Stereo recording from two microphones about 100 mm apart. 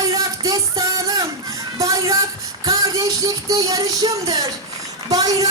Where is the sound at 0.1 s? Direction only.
35° right (ahead or behind).